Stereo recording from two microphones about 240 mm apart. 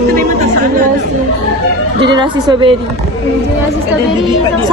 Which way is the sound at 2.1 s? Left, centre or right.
Centre.